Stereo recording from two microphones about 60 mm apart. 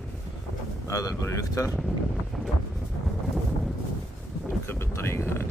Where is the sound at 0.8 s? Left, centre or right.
Left.